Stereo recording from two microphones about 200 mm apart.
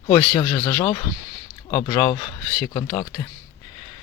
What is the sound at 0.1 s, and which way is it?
Speech, 20° left (ahead or behind).